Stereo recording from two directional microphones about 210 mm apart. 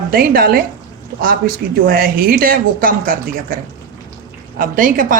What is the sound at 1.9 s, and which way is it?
Speech, 45° right (ahead or behind).